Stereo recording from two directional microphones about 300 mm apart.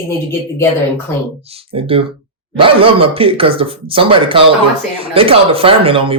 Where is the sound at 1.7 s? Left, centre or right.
Centre.